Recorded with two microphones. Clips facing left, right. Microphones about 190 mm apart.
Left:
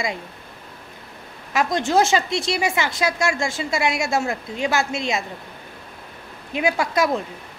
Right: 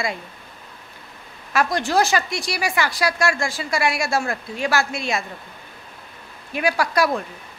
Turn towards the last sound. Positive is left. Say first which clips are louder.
# even
turn(degrees=20)  # may be behind; listen again after turning